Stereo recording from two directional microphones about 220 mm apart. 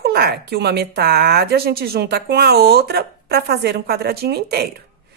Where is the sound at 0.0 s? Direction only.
45° right (ahead or behind).